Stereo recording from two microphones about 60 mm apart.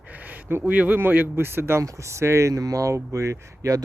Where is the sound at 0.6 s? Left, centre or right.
Right.